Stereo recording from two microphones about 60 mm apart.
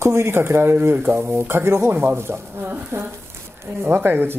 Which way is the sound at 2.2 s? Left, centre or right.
Right.